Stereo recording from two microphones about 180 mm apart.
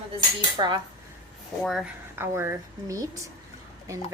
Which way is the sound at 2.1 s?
15° right (ahead or behind).